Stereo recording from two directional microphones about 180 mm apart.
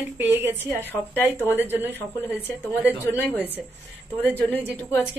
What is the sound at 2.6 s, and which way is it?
Speech, 10° left (ahead or behind).